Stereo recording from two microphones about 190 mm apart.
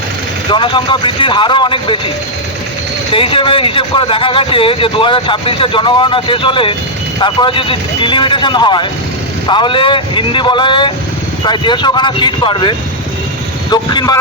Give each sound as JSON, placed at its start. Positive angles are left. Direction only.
{"t": 0.5, "sound": "speech", "side_deg": 25}
{"t": 3.1, "sound": "speech", "side_deg": 30}